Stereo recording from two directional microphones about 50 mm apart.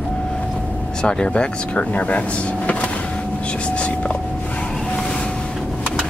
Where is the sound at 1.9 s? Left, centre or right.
Left.